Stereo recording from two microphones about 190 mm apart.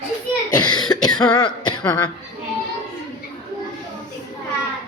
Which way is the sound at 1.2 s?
25° left (ahead or behind).